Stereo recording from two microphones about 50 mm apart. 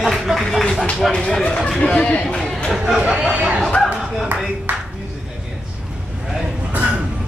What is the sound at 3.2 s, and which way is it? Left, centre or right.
Speech, right.